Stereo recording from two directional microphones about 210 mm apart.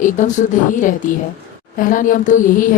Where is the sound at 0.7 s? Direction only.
40° left (ahead or behind).